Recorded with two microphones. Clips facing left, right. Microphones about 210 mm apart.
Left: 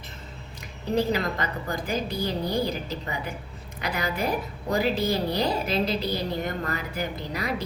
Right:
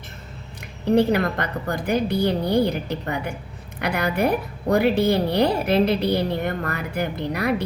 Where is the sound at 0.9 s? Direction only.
60° right (ahead or behind).